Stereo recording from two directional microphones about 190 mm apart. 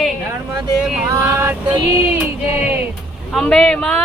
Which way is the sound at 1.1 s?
15° right (ahead or behind).